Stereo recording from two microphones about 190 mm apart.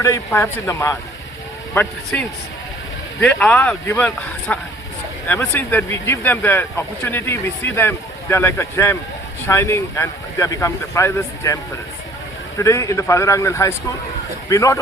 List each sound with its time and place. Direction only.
0.0 s speech: 15° left (ahead or behind)